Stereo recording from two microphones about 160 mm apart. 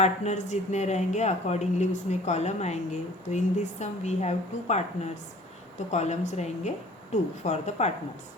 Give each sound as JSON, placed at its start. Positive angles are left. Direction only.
{"t": 0.0, "sound": "speech", "side_deg": 45}
{"t": 5.9, "sound": "speech", "side_deg": 45}